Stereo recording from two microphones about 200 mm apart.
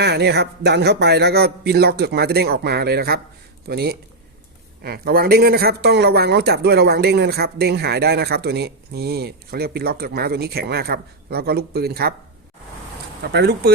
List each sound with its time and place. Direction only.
0.0 s speech: 55° right (ahead or behind)
13.2 s speech: 55° right (ahead or behind)